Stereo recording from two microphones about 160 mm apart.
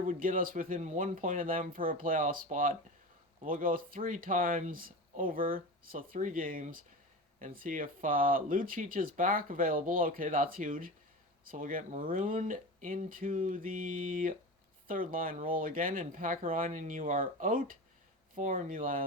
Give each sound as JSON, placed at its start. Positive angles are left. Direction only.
{"t": 0.0, "sound": "speech", "side_deg": -60}